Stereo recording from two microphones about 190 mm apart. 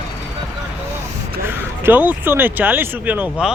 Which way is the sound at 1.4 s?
10° right (ahead or behind).